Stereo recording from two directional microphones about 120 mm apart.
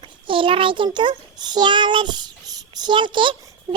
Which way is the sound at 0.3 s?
45° right (ahead or behind).